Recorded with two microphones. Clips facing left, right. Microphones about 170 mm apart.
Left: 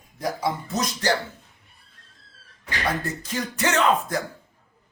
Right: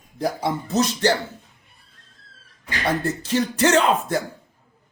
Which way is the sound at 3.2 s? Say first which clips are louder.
Right 8 dB; 35° right (ahead or behind).